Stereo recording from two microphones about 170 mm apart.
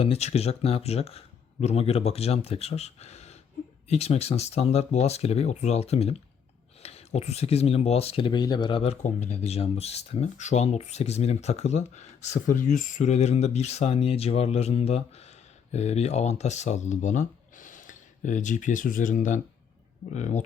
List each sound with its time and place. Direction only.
0.0 s speech: 40° left (ahead or behind)